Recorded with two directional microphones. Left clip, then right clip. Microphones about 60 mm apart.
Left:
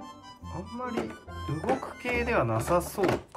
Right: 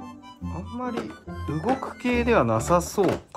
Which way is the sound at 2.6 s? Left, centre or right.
Centre.